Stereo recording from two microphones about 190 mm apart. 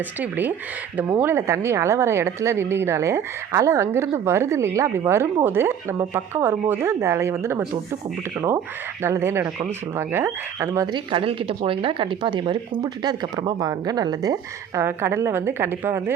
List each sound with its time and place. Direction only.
0.2 s speech: 10° right (ahead or behind)